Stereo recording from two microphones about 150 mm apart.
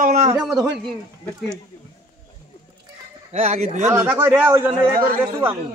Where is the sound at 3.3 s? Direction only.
45° right (ahead or behind).